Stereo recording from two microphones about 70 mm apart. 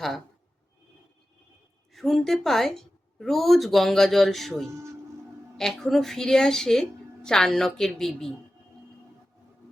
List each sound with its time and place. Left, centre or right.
1.9 s a woman's voice: centre